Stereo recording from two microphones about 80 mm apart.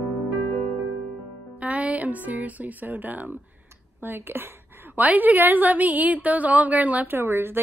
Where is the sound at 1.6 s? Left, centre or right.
Centre.